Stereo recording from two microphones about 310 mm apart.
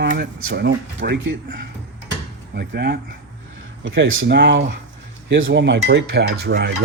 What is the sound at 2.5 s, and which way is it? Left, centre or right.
Cutlery, right.